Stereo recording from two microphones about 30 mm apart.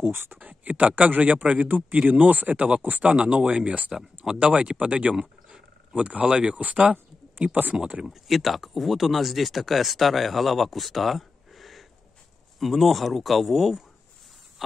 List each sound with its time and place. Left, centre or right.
0.4 s speech: right
2.0 s speech: right
3.4 s speech: right
4.2 s speech: right
5.1 s a sound: right
5.9 s speech: right
6.2 s speech: right
7.7 s speech: right
8.1 s speech: centre